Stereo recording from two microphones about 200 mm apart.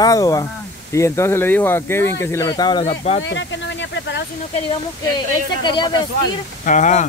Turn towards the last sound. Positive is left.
turn(degrees=40)  # may be behind; listen again after turning